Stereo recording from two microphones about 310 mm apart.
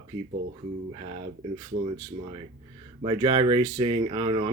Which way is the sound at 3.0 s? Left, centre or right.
Centre.